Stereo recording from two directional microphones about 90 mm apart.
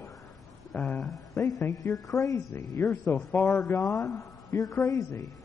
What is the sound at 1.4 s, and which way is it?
A woman's voice, 30° left (ahead or behind).